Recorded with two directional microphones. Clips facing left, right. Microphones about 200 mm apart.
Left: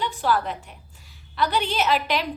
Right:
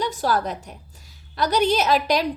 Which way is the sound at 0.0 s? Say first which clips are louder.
Right 1 dB; 40° right (ahead or behind).